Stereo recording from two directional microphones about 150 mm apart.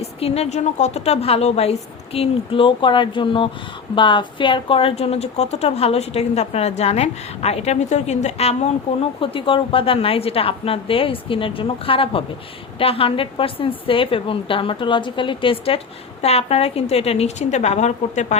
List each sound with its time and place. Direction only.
0.0 s a woman's voice: 45° left (ahead or behind)